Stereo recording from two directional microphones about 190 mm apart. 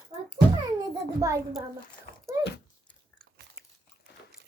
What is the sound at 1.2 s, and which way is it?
Speech, 20° right (ahead or behind).